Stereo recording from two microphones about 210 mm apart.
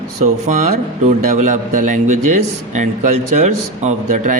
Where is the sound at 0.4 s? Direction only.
35° right (ahead or behind).